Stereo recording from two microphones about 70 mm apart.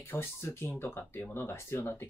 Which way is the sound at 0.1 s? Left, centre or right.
Left.